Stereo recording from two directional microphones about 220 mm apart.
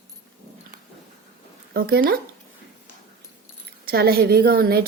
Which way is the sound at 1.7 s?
45° right (ahead or behind).